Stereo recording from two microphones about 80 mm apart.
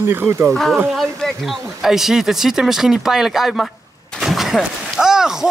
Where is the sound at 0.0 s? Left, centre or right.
Right.